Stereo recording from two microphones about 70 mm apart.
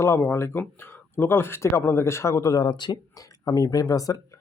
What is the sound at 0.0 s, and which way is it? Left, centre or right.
A man's voice, left.